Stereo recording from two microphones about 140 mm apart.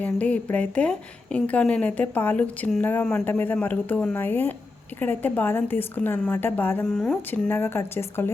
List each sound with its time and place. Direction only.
0.0 s a woman's voice: 10° left (ahead or behind)